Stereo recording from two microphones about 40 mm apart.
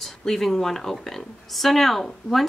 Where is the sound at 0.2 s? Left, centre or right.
Centre.